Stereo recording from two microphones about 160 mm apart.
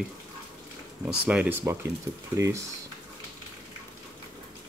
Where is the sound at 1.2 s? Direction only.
10° right (ahead or behind).